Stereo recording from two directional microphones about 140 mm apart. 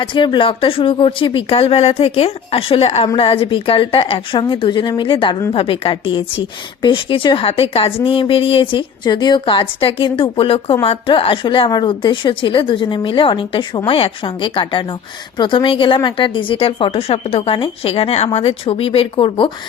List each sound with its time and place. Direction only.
0.0 s a woman's voice: 35° left (ahead or behind)